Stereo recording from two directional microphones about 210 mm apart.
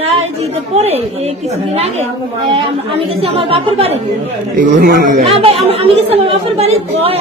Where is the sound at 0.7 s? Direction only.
30° right (ahead or behind).